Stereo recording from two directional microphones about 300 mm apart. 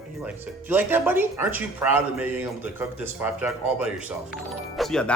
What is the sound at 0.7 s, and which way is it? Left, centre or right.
Speech, centre.